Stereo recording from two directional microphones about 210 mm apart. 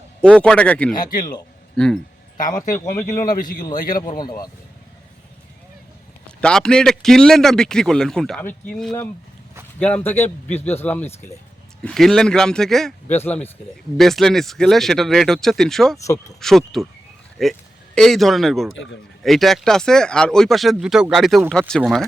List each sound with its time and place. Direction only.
0.2 s a man's voice: 5° left (ahead or behind)
2.4 s speech: 40° left (ahead or behind)
2.9 s a man's voice: 10° left (ahead or behind)
6.2 s a man's voice: 5° left (ahead or behind)